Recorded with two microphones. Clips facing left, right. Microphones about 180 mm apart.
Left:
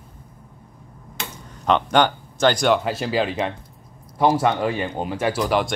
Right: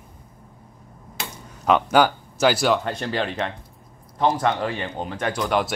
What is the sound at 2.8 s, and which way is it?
Speech, 5° left (ahead or behind).